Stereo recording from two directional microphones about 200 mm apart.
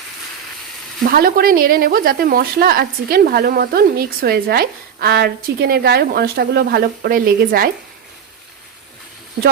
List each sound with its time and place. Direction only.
1.0 s speech: 45° right (ahead or behind)